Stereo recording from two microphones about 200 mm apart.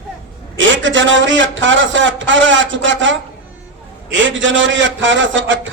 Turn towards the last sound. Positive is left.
turn(degrees=-70)  # may be behind; listen again after turning